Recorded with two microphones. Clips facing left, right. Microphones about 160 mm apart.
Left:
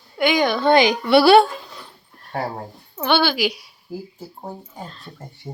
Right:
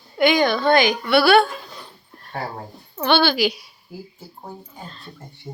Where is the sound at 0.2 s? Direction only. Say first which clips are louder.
Right 1 dB; 10° left (ahead or behind); by 1.5 s 30° left (ahead or behind).